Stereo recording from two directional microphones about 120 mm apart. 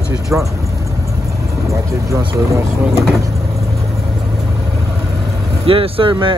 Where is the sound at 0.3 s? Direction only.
10° right (ahead or behind).